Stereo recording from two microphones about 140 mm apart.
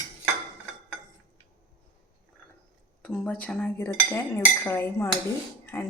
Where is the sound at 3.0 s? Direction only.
10° left (ahead or behind).